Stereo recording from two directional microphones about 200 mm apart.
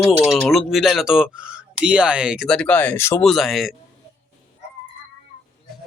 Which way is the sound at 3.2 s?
Centre (ahead or behind).